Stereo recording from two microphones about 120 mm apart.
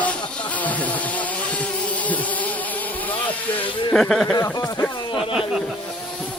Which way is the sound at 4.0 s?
Centre (ahead or behind).